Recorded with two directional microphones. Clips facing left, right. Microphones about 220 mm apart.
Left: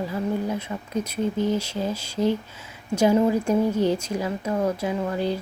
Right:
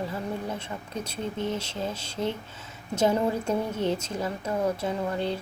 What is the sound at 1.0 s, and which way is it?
Speech, 30° right (ahead or behind).